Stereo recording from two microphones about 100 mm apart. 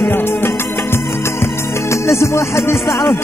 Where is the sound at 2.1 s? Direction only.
30° left (ahead or behind).